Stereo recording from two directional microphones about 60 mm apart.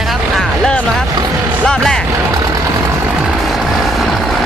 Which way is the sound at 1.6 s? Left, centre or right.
Centre.